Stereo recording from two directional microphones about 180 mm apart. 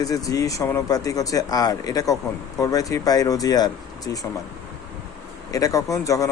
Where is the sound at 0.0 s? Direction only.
20° left (ahead or behind).